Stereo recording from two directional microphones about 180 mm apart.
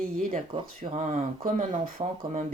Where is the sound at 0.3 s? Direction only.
35° right (ahead or behind).